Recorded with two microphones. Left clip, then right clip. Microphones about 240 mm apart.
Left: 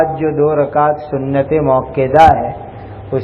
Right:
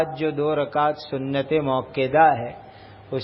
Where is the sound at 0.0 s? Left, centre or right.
Right.